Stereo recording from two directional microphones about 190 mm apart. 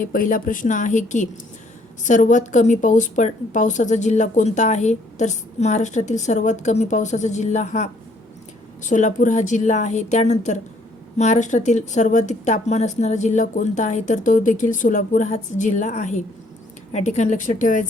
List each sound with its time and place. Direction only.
0.0 s a woman's voice: 45° left (ahead or behind)